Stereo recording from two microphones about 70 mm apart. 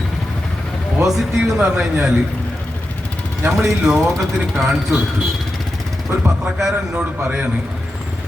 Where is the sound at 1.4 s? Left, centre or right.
Centre.